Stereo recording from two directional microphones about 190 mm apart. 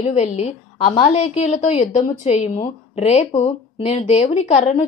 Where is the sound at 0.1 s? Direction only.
35° left (ahead or behind).